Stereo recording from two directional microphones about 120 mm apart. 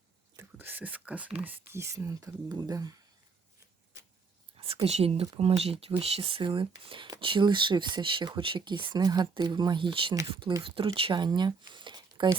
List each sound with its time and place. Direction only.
0.3 s speech: 15° right (ahead or behind); by 2.9 s 35° right (ahead or behind)
4.5 s speech: 50° right (ahead or behind)